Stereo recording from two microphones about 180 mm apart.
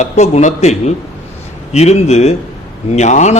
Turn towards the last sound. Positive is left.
turn(degrees=40)  # may be behind; listen again after turning